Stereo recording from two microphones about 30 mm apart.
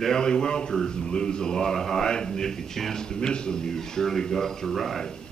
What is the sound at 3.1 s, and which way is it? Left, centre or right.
A man's voice, left.